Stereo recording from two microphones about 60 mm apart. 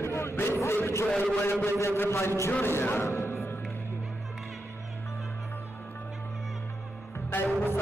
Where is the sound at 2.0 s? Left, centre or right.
Left.